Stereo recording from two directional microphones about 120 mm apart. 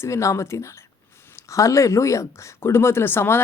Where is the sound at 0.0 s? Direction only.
25° left (ahead or behind).